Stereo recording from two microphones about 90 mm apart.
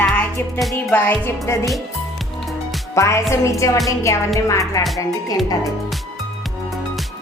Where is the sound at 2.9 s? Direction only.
35° left (ahead or behind).